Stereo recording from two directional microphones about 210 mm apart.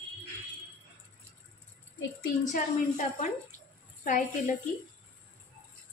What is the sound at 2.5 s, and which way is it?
Speech, 35° left (ahead or behind).